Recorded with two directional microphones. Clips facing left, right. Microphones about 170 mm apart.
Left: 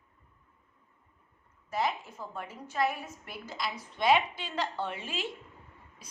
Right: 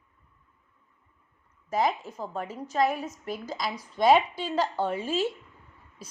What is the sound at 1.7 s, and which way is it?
A woman's voice, 40° right (ahead or behind).